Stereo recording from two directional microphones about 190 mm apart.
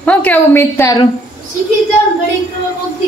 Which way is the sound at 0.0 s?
10° left (ahead or behind).